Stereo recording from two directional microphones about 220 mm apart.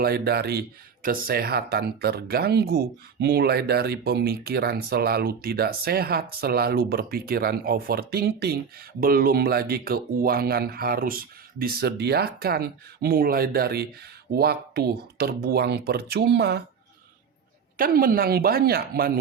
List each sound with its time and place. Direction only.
0.0 s speech: 45° right (ahead or behind)
17.7 s speech: 40° right (ahead or behind)